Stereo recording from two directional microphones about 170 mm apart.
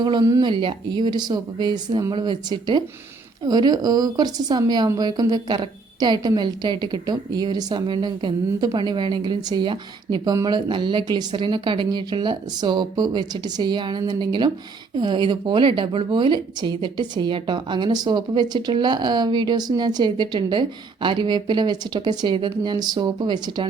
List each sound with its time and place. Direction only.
0.0 s a woman's voice: 25° right (ahead or behind)